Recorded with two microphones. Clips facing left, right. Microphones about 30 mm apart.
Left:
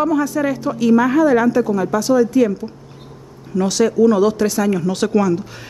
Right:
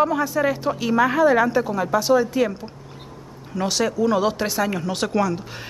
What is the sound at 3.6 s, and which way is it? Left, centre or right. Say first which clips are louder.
A woman's voice: left 7 dB; centre.